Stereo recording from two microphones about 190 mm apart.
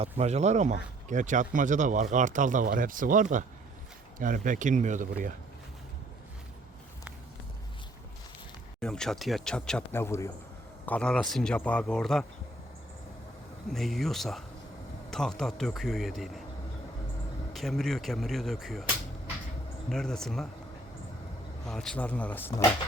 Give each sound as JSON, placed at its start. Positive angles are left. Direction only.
{"t": 0.0, "sound": "speech", "side_deg": -35}
{"t": 8.8, "sound": "speech", "side_deg": 5}
{"t": 13.7, "sound": "speech", "side_deg": 0}
{"t": 17.5, "sound": "speech", "side_deg": 0}
{"t": 19.9, "sound": "speech", "side_deg": 5}
{"t": 21.7, "sound": "a man's voice", "side_deg": 5}